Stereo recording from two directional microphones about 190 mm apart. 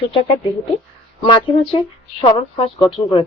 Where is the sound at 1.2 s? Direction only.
30° left (ahead or behind).